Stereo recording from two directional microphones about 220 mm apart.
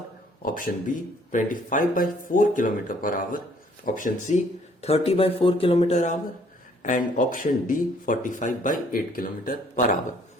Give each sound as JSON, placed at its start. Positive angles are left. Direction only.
{"t": 0.4, "sound": "speech", "side_deg": 40}